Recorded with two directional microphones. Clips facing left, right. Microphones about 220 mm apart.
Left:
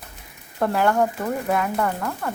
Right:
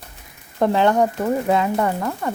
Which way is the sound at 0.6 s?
20° right (ahead or behind).